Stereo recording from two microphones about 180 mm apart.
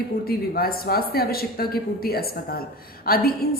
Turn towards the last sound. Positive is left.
turn(degrees=55)  # may be behind; listen again after turning